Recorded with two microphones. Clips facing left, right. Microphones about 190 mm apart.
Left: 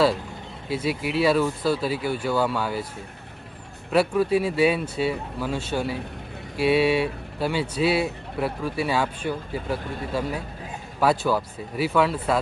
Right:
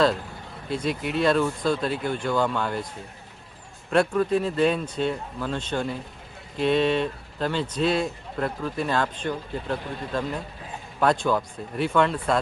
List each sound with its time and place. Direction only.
0.7 s speech: 5° left (ahead or behind)
3.9 s speech: 5° left (ahead or behind)